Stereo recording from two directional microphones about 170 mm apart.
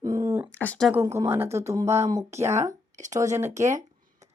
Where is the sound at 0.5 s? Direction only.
5° left (ahead or behind).